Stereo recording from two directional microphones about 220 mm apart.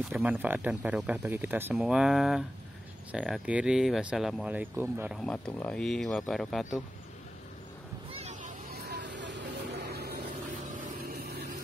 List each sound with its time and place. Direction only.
0.1 s speech: 5° right (ahead or behind)
8.1 s vehicle: 30° right (ahead or behind)
8.8 s vehicle: 50° right (ahead or behind)
10.6 s vehicle: 35° right (ahead or behind)